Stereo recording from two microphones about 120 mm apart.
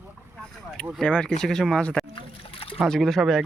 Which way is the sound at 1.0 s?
10° left (ahead or behind).